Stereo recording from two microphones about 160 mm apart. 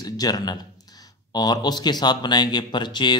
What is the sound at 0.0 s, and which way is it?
Speech, 25° left (ahead or behind).